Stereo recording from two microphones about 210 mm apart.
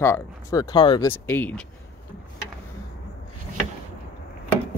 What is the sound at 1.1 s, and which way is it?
Speech, 10° left (ahead or behind).